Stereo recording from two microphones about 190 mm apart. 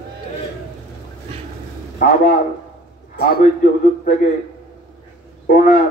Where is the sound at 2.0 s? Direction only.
45° left (ahead or behind).